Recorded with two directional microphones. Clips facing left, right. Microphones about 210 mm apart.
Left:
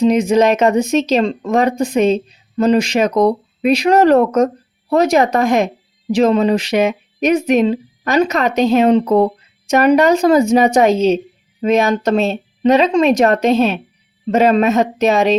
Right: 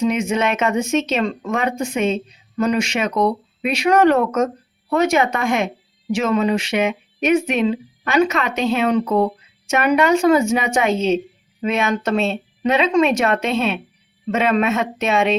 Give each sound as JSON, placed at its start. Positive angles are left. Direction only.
{"t": 0.0, "sound": "speech", "side_deg": 35}